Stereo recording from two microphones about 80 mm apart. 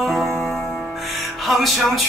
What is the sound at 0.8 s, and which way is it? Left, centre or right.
Music, centre.